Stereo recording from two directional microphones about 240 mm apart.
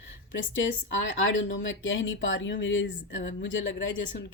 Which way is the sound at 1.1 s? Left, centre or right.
Left.